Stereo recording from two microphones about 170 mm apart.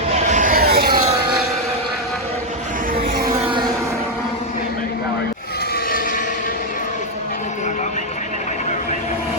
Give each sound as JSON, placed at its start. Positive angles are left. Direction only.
{"t": 0.1, "sound": "vehicle", "side_deg": -45}